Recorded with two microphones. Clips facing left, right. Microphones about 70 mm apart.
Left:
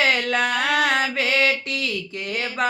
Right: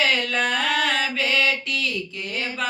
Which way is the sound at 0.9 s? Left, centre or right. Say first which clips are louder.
Left 2 dB; left.